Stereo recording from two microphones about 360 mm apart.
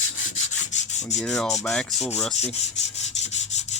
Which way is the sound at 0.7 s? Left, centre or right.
Centre.